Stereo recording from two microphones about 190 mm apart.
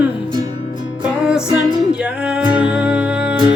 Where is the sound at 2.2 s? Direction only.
5° right (ahead or behind).